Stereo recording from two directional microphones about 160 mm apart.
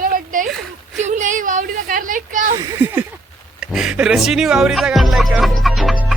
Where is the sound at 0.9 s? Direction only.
50° right (ahead or behind).